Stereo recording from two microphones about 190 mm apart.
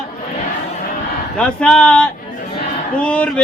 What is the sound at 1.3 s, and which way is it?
A man's voice, 5° left (ahead or behind).